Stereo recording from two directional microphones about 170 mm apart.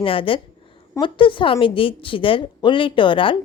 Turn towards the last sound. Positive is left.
turn(degrees=30)  # may be behind; listen again after turning